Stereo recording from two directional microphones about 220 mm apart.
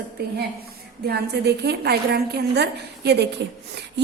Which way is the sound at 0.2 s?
45° right (ahead or behind).